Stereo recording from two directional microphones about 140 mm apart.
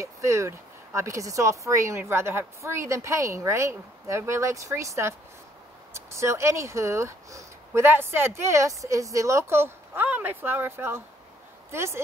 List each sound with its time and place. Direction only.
0.0 s speech: 20° right (ahead or behind)